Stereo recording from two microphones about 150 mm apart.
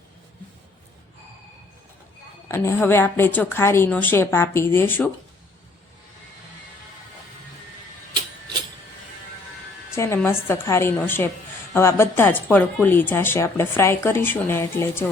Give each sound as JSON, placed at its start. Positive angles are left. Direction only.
{"t": 2.5, "sound": "speech", "side_deg": 15}
{"t": 9.9, "sound": "speech", "side_deg": 15}